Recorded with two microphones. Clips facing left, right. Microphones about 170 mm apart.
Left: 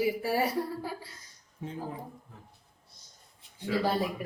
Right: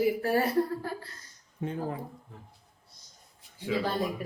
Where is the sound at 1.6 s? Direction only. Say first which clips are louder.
Right 6 dB; 60° right (ahead or behind).